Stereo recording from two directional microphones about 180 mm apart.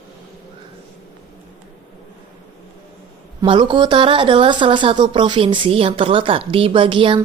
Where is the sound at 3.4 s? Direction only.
25° right (ahead or behind).